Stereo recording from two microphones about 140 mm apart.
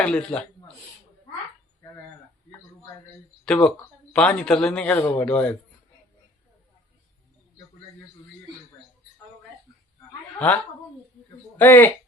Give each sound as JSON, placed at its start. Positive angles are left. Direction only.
{"t": 0.0, "sound": "a man's voice", "side_deg": 10}
{"t": 3.4, "sound": "a man's voice", "side_deg": 5}
{"t": 10.3, "sound": "a woman's voice", "side_deg": 10}